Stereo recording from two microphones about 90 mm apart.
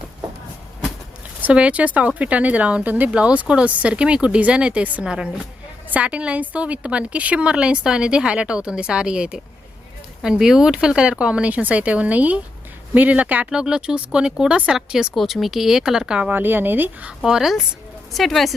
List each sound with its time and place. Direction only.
1.5 s speech: 15° right (ahead or behind)
16.3 s speech: 20° right (ahead or behind)
17.2 s speech: 5° right (ahead or behind)